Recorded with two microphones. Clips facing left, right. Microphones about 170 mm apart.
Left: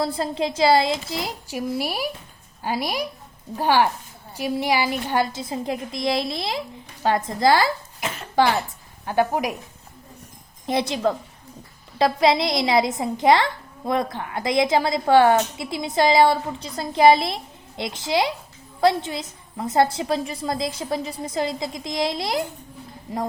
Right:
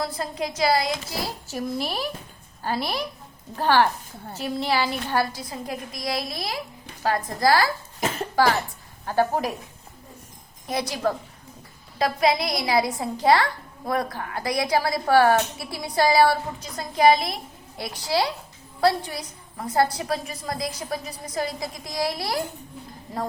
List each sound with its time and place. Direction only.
0.0 s a woman's voice: 30° left (ahead or behind)
10.7 s a woman's voice: 25° left (ahead or behind)